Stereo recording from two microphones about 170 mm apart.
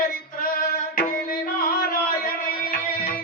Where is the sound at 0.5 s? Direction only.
60° left (ahead or behind).